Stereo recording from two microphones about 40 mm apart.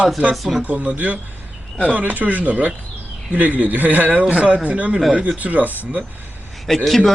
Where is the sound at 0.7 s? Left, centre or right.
Right.